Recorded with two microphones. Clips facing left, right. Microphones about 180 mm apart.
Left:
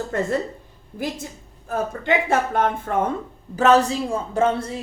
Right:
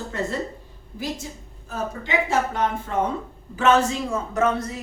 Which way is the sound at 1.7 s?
55° left (ahead or behind).